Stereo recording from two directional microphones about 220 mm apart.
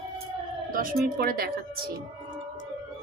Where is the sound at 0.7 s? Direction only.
40° right (ahead or behind).